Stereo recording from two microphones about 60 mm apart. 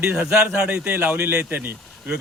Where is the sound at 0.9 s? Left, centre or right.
Right.